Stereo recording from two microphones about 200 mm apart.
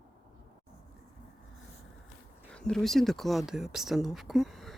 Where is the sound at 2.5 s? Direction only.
5° left (ahead or behind).